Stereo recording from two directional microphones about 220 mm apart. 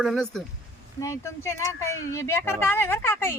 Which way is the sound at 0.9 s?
15° left (ahead or behind).